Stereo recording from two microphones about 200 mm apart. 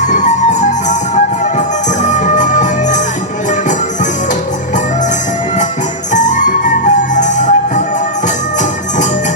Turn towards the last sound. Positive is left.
turn(degrees=40)  # may be behind; listen again after turning